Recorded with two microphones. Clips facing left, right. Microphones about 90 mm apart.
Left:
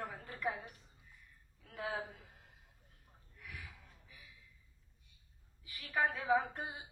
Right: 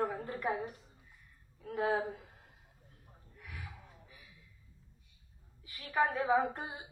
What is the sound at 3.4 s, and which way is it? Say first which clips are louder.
Gasp: right 2 dB; 30° right (ahead or behind).